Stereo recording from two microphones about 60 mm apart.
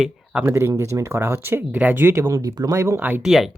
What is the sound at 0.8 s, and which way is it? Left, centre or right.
Speech, right.